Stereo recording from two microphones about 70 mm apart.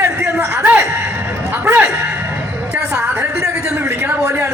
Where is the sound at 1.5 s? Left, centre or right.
Right.